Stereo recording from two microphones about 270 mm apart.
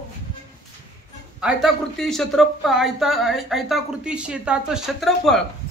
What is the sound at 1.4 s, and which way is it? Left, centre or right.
Speech, centre.